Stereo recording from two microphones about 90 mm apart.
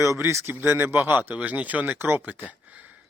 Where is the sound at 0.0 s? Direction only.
35° right (ahead or behind).